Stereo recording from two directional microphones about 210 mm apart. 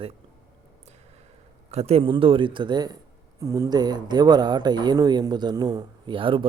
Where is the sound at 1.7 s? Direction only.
30° right (ahead or behind).